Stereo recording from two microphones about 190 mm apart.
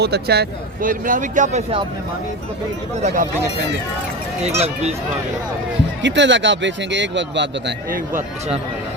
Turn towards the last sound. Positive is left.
turn(degrees=-70)  # may be behind; listen again after turning